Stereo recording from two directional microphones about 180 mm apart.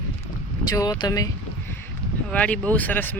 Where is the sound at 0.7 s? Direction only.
20° left (ahead or behind).